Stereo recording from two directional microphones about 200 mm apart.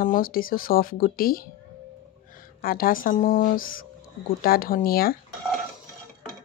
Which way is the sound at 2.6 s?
45° left (ahead or behind).